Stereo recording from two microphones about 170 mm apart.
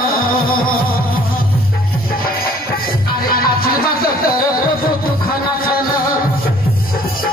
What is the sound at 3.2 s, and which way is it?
Music, 60° left (ahead or behind).